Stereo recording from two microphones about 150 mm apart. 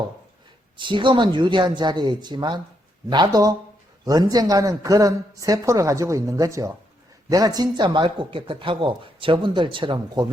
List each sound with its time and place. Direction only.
0.8 s a man's voice: 30° right (ahead or behind)